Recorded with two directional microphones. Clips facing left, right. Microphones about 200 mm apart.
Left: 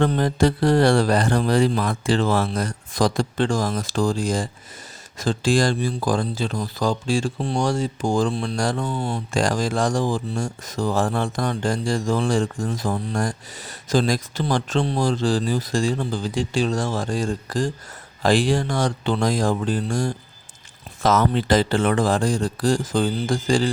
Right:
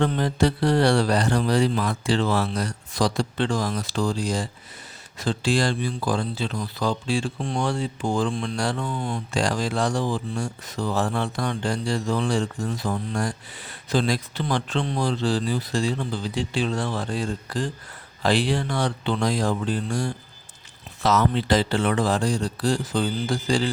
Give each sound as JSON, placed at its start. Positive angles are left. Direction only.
{"t": 0.0, "sound": "speech", "side_deg": 45}
{"t": 8.9, "sound": "speech", "side_deg": 30}
{"t": 9.3, "sound": "speech", "side_deg": 45}